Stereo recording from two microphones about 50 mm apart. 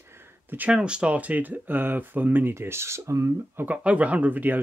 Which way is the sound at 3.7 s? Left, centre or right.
Right.